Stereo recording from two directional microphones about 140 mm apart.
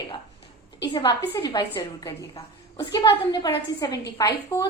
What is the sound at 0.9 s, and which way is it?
A woman's voice, 30° left (ahead or behind).